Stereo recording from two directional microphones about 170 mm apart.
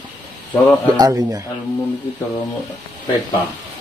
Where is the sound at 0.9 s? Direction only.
20° right (ahead or behind).